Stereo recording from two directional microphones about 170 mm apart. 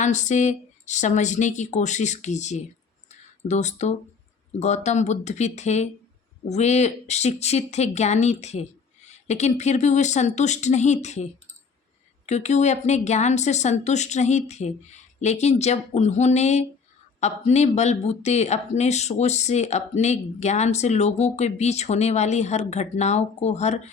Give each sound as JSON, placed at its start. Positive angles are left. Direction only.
{"t": 0.0, "sound": "speech", "side_deg": 45}
{"t": 3.1, "sound": "a sound", "side_deg": 45}
{"t": 4.6, "sound": "speech", "side_deg": 40}